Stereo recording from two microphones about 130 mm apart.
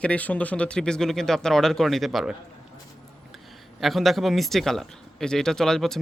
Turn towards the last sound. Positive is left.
turn(degrees=5)  # may be behind; listen again after turning